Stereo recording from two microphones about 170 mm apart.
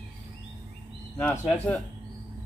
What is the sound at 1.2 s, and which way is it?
Speech, 10° left (ahead or behind).